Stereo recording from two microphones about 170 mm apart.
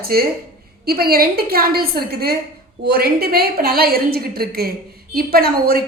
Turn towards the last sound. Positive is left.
turn(degrees=-65)  # may be behind; listen again after turning